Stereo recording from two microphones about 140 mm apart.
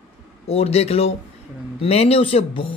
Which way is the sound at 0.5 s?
45° left (ahead or behind).